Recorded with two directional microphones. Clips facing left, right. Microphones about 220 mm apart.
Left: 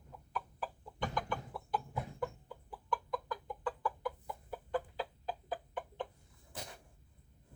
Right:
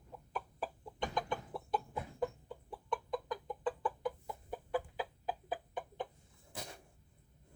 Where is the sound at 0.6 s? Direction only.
20° right (ahead or behind).